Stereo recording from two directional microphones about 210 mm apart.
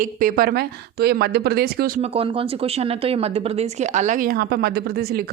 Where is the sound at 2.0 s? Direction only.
25° right (ahead or behind); by 5.3 s 50° right (ahead or behind).